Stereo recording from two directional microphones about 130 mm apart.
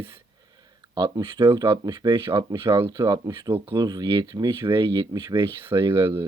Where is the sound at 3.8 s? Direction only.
30° right (ahead or behind).